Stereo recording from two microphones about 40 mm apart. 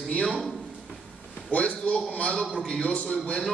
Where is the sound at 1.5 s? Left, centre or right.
Left.